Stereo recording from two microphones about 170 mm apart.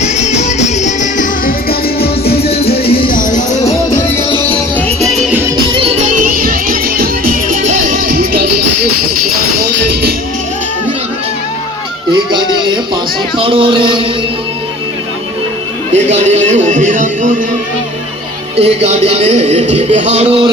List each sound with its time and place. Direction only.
0.0 s music: 40° left (ahead or behind)
2.0 s music: 65° left (ahead or behind)
2.7 s music: 35° left (ahead or behind)
3.1 s music: 50° left (ahead or behind)
4.9 s music: 40° right (ahead or behind)
5.3 s music: 15° right (ahead or behind)
5.7 s music: 35° right (ahead or behind)
6.2 s music: 55° right (ahead or behind)
9.9 s music: 70° right (ahead or behind)
12.1 s music: 25° right (ahead or behind)
13.4 s speech: 30° right (ahead or behind)
15.9 s speech: 40° right (ahead or behind)
16.6 s music: 50° right (ahead or behind)
18.5 s speech: 40° right (ahead or behind)